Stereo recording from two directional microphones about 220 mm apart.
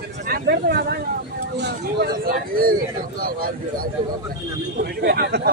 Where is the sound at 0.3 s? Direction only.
45° right (ahead or behind).